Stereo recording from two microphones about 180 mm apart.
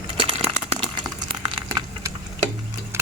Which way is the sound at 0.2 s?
30° right (ahead or behind).